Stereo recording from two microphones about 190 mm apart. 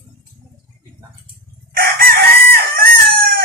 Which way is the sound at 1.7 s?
50° right (ahead or behind).